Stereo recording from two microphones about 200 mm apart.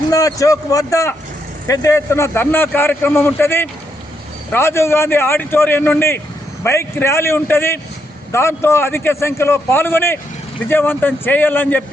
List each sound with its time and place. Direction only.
0.1 s a man's voice: 15° left (ahead or behind)